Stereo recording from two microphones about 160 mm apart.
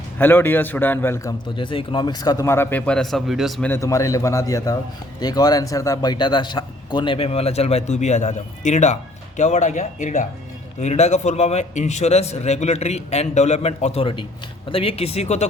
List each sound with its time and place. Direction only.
0.2 s a man's voice: 15° left (ahead or behind)
3.7 s a man's voice: 20° left (ahead or behind); by 15.4 s 40° left (ahead or behind)